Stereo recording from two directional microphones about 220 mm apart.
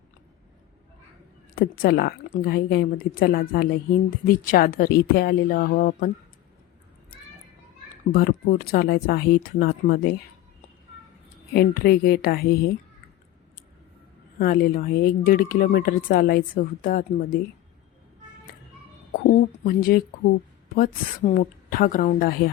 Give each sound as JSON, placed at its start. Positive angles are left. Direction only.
{"t": 1.5, "sound": "a woman's voice", "side_deg": 40}
{"t": 8.1, "sound": "speech", "side_deg": 40}
{"t": 11.5, "sound": "a woman's voice", "side_deg": 45}
{"t": 14.3, "sound": "speech", "side_deg": 40}
{"t": 19.3, "sound": "speech", "side_deg": 40}